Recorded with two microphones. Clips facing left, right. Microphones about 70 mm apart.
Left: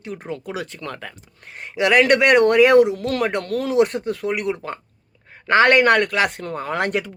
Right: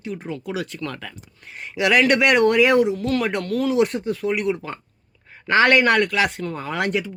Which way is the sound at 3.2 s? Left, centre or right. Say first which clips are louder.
Even; left.